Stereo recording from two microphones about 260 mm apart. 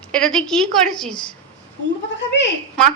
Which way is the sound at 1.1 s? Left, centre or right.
Centre.